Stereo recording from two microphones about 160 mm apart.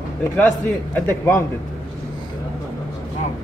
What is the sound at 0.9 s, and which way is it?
Speech, 15° left (ahead or behind).